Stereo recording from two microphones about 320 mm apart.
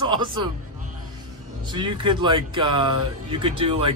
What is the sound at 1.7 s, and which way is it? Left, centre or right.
Speech, centre.